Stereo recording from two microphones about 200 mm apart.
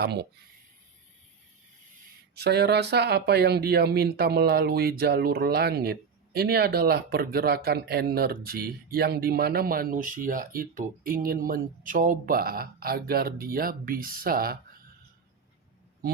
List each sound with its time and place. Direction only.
0.0 s speech: 55° right (ahead or behind)
2.3 s speech: 55° right (ahead or behind)